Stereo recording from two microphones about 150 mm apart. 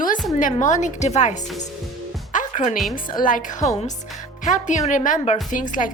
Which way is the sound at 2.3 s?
55° left (ahead or behind).